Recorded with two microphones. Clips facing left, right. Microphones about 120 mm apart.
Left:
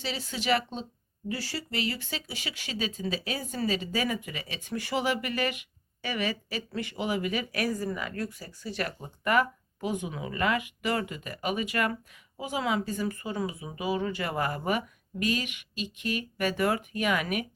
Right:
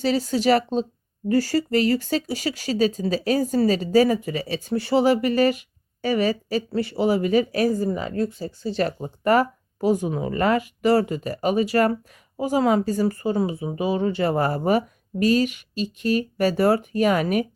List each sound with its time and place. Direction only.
0.0 s speech: 40° right (ahead or behind)